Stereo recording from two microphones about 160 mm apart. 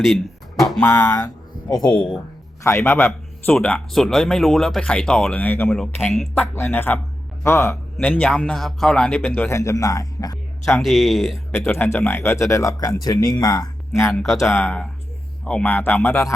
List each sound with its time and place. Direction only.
0.9 s speech: 20° left (ahead or behind)
2.6 s a man's voice: 15° left (ahead or behind)
6.4 s a man's voice: 15° left (ahead or behind)
10.8 s speech: centre (ahead or behind)
11.5 s a man's voice: 15° left (ahead or behind)